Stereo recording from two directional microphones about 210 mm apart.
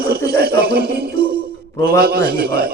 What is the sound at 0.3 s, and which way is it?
A man's voice, 45° right (ahead or behind).